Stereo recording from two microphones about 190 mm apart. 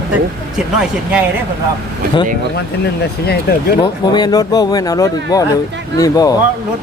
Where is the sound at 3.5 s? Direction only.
55° left (ahead or behind).